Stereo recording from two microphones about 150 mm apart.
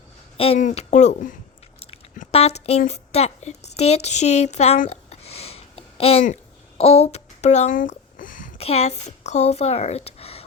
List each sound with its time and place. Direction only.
0.3 s a woman's voice: 40° left (ahead or behind); by 1.4 s 55° left (ahead or behind)
2.3 s a woman's voice: 45° left (ahead or behind)
4.9 s a sound: 45° left (ahead or behind); by 8.5 s 65° left (ahead or behind)
8.5 s speech: 45° left (ahead or behind)